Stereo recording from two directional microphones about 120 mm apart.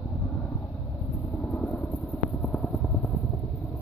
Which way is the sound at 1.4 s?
5° left (ahead or behind).